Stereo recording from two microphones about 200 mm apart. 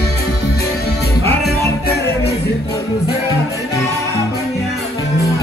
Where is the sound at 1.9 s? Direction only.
50° left (ahead or behind).